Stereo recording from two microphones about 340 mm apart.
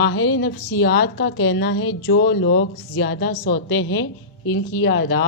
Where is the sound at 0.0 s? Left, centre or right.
Left.